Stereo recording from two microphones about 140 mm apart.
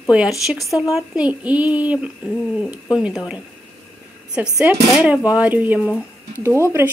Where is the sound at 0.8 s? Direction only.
5° right (ahead or behind).